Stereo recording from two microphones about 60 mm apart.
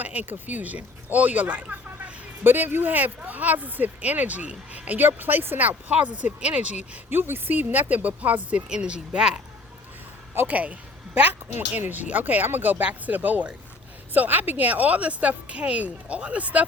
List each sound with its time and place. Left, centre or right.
0.0 s speech: right
7.1 s speech: right
8.7 s speech: centre
10.4 s speech: right